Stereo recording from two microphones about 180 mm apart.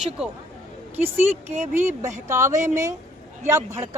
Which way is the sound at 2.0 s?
15° right (ahead or behind).